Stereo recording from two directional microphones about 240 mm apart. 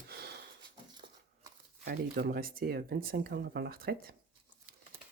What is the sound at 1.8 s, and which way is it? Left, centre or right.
Speech, right.